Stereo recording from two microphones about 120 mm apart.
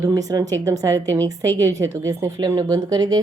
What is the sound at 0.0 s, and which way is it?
A woman's voice, 30° right (ahead or behind).